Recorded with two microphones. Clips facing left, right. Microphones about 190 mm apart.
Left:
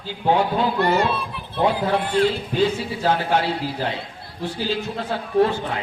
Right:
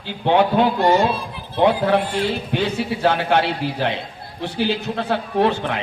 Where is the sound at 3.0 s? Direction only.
70° right (ahead or behind).